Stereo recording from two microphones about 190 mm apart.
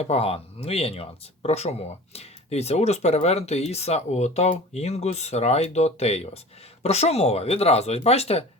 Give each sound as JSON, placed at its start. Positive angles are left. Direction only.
{"t": 0.0, "sound": "speech", "side_deg": 30}